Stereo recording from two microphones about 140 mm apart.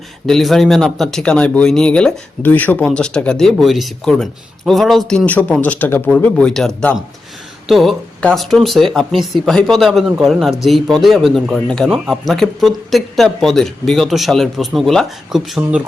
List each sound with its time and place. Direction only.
0.3 s speech: centre (ahead or behind)